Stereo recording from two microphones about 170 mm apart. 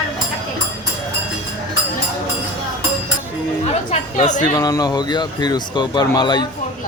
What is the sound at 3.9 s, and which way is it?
Speech, 45° left (ahead or behind).